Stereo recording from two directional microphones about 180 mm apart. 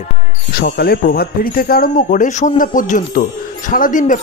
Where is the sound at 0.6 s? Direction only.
55° left (ahead or behind).